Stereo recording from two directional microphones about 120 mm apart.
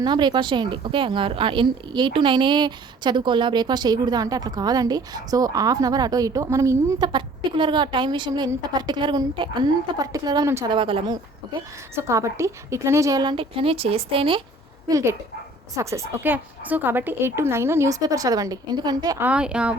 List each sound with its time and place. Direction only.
0.0 s a woman's voice: 40° right (ahead or behind)
7.1 s a woman's voice: 40° right (ahead or behind)
10.7 s speech: 45° right (ahead or behind)
11.9 s a woman's voice: 25° right (ahead or behind)
13.3 s speech: 50° right (ahead or behind)
14.8 s a woman's voice: 30° right (ahead or behind)
19.2 s speech: 10° right (ahead or behind)